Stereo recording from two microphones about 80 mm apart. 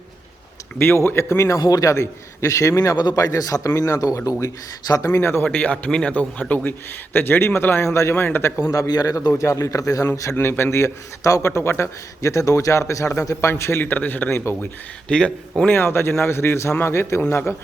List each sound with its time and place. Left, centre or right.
0.8 s a man's voice: left
1.5 s a man's voice: left
5.2 s a man's voice: left
5.5 s a man's voice: centre; by 8.9 s left
8.9 s a man's voice: left
15.1 s a man's voice: centre
15.7 s a man's voice: left